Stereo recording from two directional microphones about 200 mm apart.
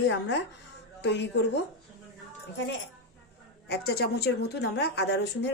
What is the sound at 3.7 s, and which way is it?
A woman's voice, 55° left (ahead or behind).